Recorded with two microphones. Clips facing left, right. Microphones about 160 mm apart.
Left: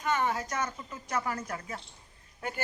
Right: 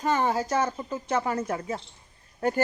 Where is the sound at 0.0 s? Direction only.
30° right (ahead or behind).